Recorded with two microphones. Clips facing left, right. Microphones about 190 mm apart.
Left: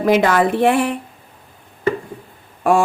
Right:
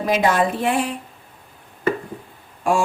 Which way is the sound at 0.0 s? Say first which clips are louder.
Left 4 dB; 65° left (ahead or behind).